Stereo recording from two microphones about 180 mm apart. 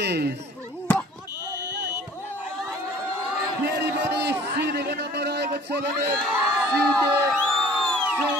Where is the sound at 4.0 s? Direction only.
70° right (ahead or behind).